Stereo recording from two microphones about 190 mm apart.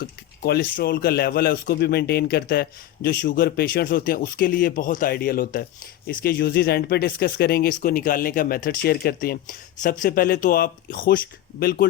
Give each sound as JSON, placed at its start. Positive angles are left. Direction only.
{"t": 0.0, "sound": "a man's voice", "side_deg": 55}